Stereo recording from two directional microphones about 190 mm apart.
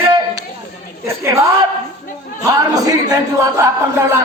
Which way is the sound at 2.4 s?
20° right (ahead or behind).